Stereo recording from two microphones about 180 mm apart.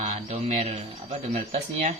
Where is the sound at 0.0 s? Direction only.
40° right (ahead or behind).